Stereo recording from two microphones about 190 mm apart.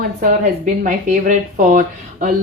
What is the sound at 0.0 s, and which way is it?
A woman's voice, 45° right (ahead or behind).